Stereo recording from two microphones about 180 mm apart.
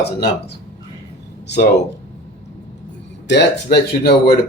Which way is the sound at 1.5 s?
60° left (ahead or behind).